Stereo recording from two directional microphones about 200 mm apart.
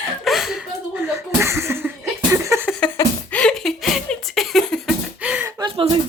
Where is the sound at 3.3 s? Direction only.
5° left (ahead or behind).